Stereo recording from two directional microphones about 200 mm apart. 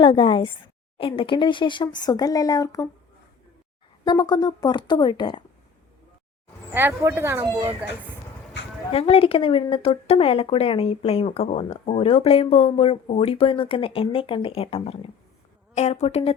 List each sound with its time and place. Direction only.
0.0 s a woman's voice: 25° left (ahead or behind)
4.0 s a woman's voice: 20° left (ahead or behind)
6.7 s speech: 10° right (ahead or behind)
8.6 s a sound: 65° left (ahead or behind)
8.9 s a woman's voice: 30° left (ahead or behind)